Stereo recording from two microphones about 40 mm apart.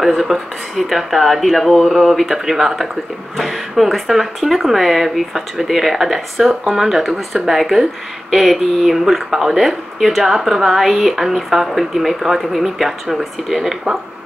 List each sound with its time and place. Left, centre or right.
0.0 s speech: centre